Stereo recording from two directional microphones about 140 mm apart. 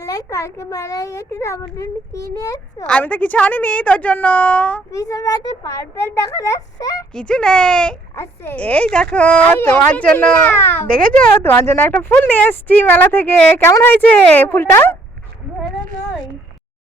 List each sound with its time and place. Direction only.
0.0 s a child's voice: 25° left (ahead or behind)
2.8 s speech: 10° left (ahead or behind)
4.9 s a child's voice: 25° left (ahead or behind)
7.1 s speech: 5° left (ahead or behind)
8.1 s speech: 15° left (ahead or behind)